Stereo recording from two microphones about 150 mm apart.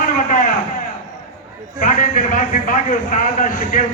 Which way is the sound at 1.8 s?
60° left (ahead or behind).